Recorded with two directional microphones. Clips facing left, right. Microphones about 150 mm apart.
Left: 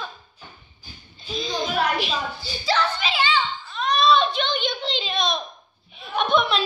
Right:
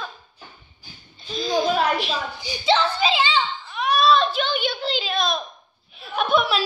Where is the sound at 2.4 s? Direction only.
20° right (ahead or behind).